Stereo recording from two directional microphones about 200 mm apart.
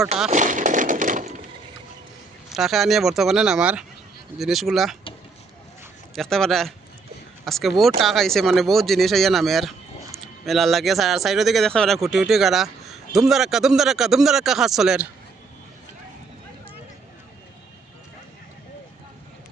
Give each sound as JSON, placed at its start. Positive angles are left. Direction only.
{"t": 0.3, "sound": "a sound", "side_deg": -40}
{"t": 2.5, "sound": "a man's voice", "side_deg": 0}
{"t": 6.1, "sound": "a man's voice", "side_deg": 0}